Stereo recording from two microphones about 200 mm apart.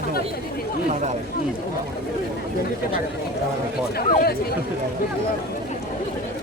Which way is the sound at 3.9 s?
50° left (ahead or behind).